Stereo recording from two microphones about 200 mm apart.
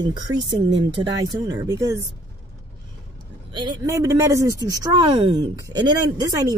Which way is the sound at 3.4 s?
20° right (ahead or behind).